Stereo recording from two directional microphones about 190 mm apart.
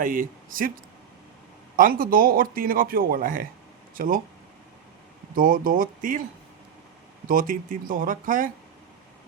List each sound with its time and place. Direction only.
0.0 s speech: 45° right (ahead or behind)
1.7 s speech: 45° right (ahead or behind)
5.3 s speech: 45° right (ahead or behind)
7.3 s speech: 45° right (ahead or behind)